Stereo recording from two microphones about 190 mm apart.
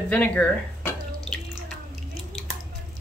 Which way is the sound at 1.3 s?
5° left (ahead or behind).